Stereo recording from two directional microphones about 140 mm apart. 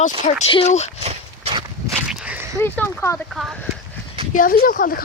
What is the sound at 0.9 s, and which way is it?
Dog, 45° right (ahead or behind).